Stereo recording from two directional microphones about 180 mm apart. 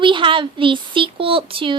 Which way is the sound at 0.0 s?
25° right (ahead or behind).